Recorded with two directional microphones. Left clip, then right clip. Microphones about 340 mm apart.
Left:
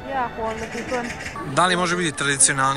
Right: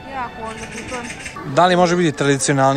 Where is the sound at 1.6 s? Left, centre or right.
Right.